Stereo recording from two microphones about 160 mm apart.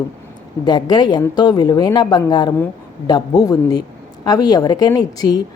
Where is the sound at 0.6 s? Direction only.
25° left (ahead or behind).